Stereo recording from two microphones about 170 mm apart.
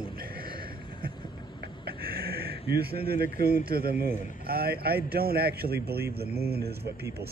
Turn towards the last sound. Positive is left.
turn(degrees=-65)  # may be behind; listen again after turning